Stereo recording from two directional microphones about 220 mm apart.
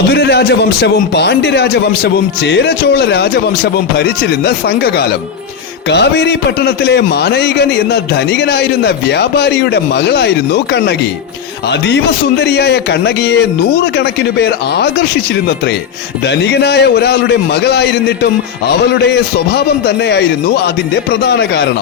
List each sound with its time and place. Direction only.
0.1 s a man's voice: 45° left (ahead or behind)